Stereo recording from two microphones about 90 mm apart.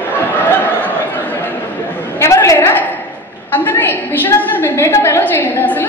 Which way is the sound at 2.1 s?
30° left (ahead or behind).